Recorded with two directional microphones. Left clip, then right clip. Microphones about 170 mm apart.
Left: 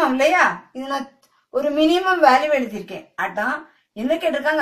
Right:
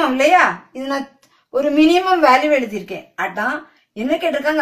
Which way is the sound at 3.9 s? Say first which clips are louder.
Right 2 dB; 20° right (ahead or behind).